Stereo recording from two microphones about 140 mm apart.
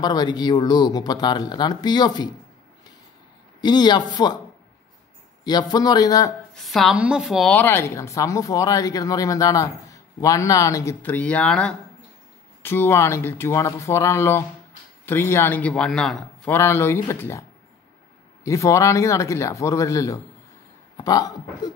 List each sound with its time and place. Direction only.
0.0 s speech: 30° left (ahead or behind)
3.6 s speech: 30° left (ahead or behind)
5.4 s speech: 30° left (ahead or behind)
6.5 s a woman's voice: centre (ahead or behind)
7.4 s a man's voice: 10° left (ahead or behind)
16.5 s speech: 15° left (ahead or behind)